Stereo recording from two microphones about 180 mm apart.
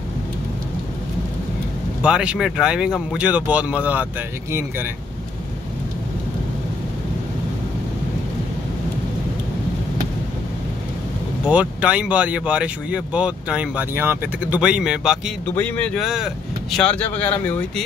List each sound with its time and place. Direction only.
2.0 s speech: 5° right (ahead or behind)
11.4 s speech: 5° right (ahead or behind)
15.4 s speech: 10° left (ahead or behind)